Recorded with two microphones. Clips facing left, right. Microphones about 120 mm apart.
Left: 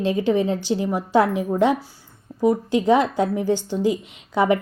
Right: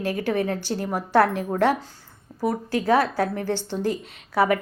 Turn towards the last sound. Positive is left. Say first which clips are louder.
# left 2 dB
turn(degrees=20)  # may be behind; listen again after turning